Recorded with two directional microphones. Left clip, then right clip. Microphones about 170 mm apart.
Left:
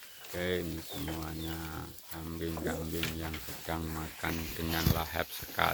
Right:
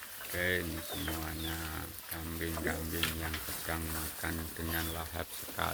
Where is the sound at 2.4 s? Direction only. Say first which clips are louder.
Even; 10° left (ahead or behind).